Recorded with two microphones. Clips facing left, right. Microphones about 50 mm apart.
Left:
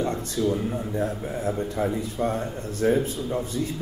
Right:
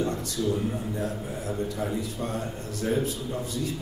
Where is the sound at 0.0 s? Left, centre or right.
Left.